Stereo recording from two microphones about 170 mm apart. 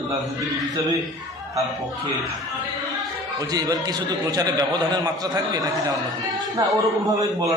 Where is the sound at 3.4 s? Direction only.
20° right (ahead or behind).